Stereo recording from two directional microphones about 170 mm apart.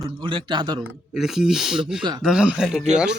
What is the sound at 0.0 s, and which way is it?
Speech, 30° right (ahead or behind).